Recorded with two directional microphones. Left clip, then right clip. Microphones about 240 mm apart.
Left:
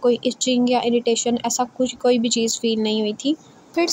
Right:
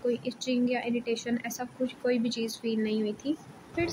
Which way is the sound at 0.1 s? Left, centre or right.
Left.